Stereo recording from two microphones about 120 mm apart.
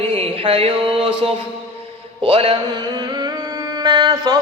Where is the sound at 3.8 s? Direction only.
35° right (ahead or behind).